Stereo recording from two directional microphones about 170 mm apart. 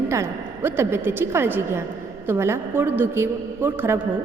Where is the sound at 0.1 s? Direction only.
15° right (ahead or behind).